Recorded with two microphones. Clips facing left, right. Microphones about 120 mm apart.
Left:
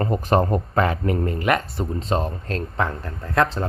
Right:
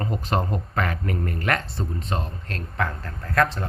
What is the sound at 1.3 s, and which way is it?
Speech, 15° left (ahead or behind).